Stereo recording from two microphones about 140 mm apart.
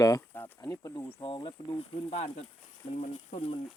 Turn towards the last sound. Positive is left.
turn(degrees=45)  # may be behind; listen again after turning